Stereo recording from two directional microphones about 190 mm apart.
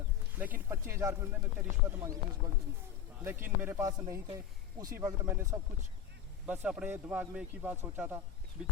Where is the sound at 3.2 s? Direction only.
10° right (ahead or behind).